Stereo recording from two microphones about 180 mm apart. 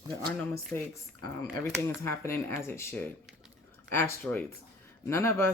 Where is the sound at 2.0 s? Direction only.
15° left (ahead or behind).